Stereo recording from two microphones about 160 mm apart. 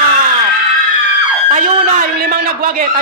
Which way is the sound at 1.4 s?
55° right (ahead or behind).